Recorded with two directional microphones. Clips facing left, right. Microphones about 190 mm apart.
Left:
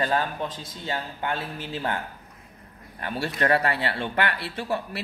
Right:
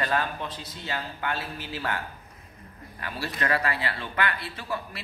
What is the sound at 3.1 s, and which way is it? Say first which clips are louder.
Speech: left 5 dB; 60° left (ahead or behind).